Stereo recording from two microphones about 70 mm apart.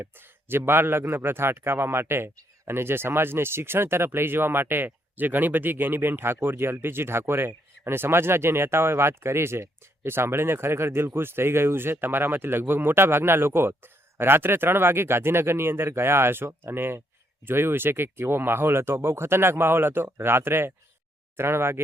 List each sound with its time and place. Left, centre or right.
0.0 s a man's voice: right